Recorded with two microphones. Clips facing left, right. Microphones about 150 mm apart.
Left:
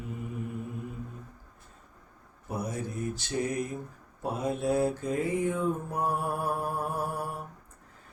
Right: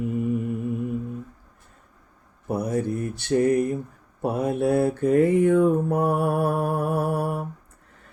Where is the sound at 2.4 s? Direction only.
60° right (ahead or behind).